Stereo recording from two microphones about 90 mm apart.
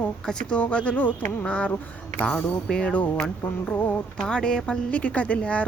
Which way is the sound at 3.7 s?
20° left (ahead or behind).